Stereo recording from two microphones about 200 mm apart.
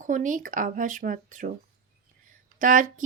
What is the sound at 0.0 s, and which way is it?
Speech, 40° right (ahead or behind).